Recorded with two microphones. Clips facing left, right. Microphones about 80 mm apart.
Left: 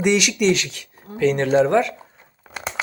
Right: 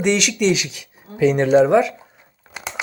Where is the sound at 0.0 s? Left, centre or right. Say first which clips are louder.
Even; centre.